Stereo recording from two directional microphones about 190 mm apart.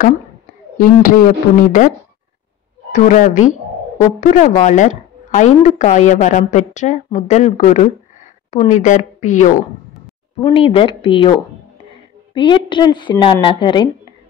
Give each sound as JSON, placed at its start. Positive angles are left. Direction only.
{"t": 0.7, "sound": "speech", "side_deg": 45}
{"t": 2.9, "sound": "a woman's voice", "side_deg": 40}
{"t": 10.4, "sound": "a woman's voice", "side_deg": 30}
{"t": 12.4, "sound": "a woman's voice", "side_deg": 25}